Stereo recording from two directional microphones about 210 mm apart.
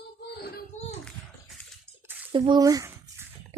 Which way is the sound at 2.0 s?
10° right (ahead or behind).